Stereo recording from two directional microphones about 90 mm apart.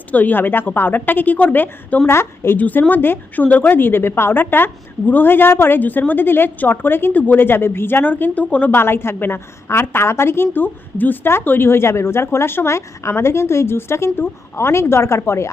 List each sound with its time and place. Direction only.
0.1 s a woman's voice: 20° left (ahead or behind)